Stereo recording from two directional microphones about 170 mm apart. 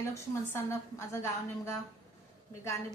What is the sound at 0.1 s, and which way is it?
A woman's voice, 15° left (ahead or behind).